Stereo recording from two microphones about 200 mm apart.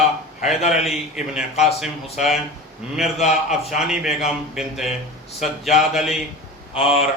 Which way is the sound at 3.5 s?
Centre (ahead or behind).